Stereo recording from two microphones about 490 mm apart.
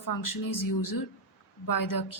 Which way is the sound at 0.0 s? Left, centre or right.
Left.